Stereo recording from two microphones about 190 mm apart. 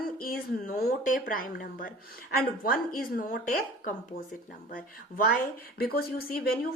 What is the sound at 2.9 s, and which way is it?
Speech, 45° left (ahead or behind).